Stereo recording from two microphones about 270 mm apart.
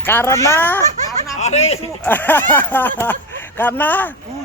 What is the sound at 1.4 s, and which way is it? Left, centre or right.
Speech, left.